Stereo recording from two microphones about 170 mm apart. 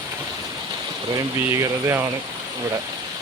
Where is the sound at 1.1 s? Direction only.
20° right (ahead or behind).